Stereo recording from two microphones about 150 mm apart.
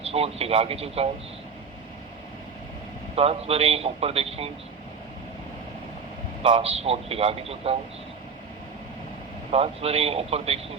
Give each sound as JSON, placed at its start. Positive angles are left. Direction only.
{"t": 0.0, "sound": "a man's voice", "side_deg": -40}
{"t": 3.2, "sound": "a man's voice", "side_deg": -40}
{"t": 6.4, "sound": "a man's voice", "side_deg": -40}
{"t": 9.5, "sound": "speech", "side_deg": -40}